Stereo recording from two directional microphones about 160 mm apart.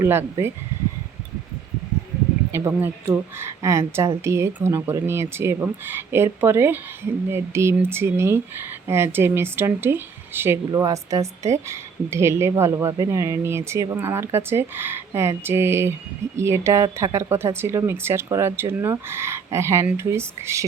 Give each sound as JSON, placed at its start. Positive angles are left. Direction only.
{"t": 0.0, "sound": "speech", "side_deg": -15}
{"t": 2.5, "sound": "speech", "side_deg": -15}